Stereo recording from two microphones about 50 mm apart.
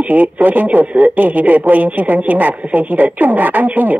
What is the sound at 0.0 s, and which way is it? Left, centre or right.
Speech, right.